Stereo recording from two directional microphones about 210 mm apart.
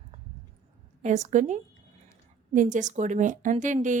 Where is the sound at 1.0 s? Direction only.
35° right (ahead or behind).